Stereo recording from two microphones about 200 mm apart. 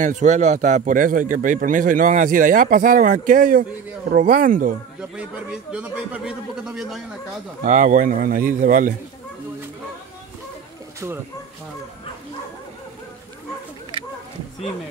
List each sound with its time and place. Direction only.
0.0 s speech: 40° right (ahead or behind)
5.1 s a man's voice: 5° right (ahead or behind)
7.6 s speech: 40° right (ahead or behind)